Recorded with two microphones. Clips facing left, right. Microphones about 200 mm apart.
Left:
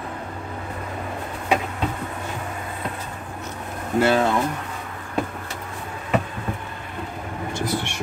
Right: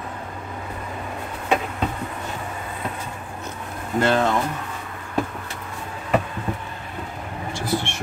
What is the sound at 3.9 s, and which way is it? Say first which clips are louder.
Speech: left 1 dB; 10° left (ahead or behind).